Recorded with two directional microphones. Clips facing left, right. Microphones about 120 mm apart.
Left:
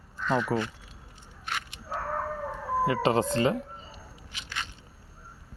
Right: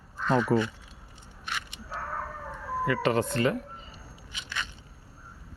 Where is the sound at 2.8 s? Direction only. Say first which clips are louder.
Even; 25° left (ahead or behind).